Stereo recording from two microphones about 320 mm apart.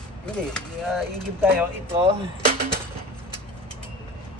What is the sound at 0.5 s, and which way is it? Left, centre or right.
Speech, centre.